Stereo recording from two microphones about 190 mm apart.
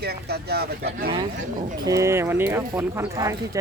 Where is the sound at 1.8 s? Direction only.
15° right (ahead or behind).